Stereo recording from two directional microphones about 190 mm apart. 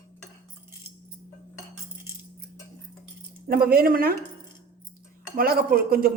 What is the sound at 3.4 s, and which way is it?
Speech, 50° right (ahead or behind).